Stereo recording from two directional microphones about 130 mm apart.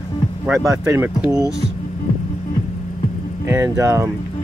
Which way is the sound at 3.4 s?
20° right (ahead or behind).